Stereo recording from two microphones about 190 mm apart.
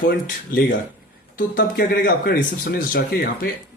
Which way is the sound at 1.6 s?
50° left (ahead or behind).